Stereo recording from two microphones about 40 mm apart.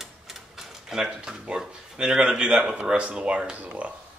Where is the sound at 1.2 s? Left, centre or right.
Centre.